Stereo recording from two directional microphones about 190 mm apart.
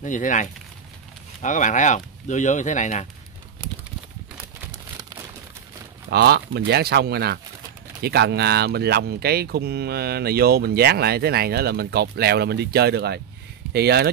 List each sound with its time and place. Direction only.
0.0 s speech: 40° left (ahead or behind)
3.6 s a sound: 25° right (ahead or behind)
6.0 s speech: 60° right (ahead or behind)